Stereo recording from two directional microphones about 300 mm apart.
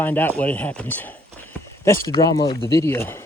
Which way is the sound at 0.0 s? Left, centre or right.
Centre.